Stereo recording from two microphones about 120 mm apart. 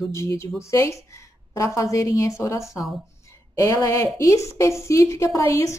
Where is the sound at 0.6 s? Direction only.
25° left (ahead or behind).